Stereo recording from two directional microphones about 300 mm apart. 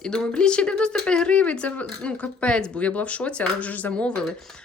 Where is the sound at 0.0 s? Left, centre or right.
Centre.